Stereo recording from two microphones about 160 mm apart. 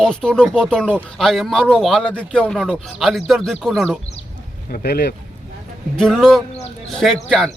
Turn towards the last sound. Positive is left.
turn(degrees=5)  # may be behind; listen again after turning